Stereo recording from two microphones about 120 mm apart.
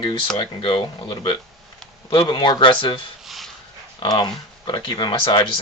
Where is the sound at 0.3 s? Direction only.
45° left (ahead or behind).